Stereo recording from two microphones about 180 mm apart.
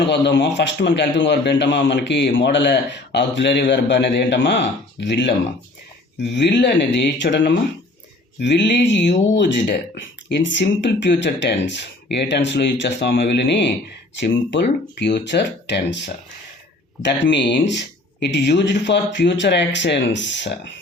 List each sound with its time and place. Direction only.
0.1 s speech: 75° left (ahead or behind)